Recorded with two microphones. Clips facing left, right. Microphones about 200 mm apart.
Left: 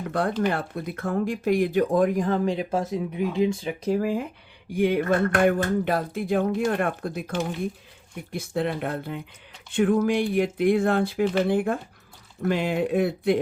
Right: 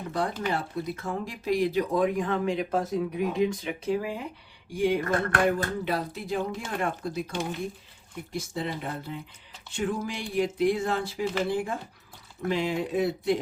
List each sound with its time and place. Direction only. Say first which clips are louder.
0.1 s speech: left 4 dB; 55° left (ahead or behind)